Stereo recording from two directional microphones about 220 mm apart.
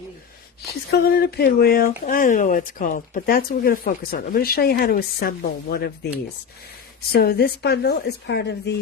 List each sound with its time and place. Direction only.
0.9 s speech: 45° left (ahead or behind)
7.1 s speech: 45° left (ahead or behind)